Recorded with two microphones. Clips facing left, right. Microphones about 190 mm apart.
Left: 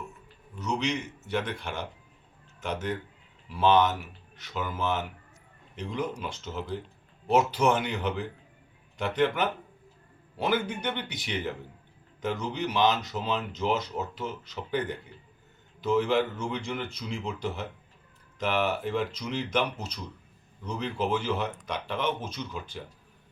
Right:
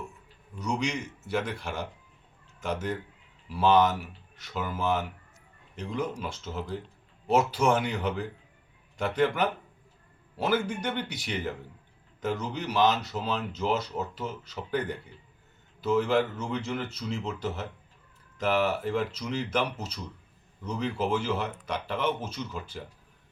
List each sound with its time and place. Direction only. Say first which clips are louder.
0.6 s speech: left 1 dB; 10° right (ahead or behind)
16.4 s speech: right 1 dB; 5° right (ahead or behind)